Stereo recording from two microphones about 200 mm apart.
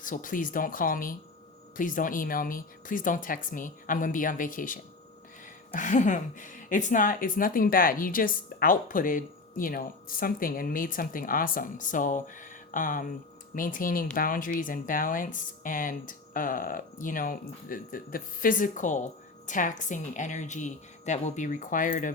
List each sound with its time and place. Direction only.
0.0 s a woman's voice: 40° left (ahead or behind)